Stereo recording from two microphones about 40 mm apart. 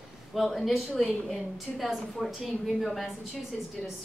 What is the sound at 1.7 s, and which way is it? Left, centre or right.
Speech, centre.